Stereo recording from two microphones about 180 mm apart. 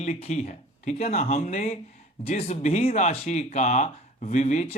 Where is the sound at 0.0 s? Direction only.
40° left (ahead or behind).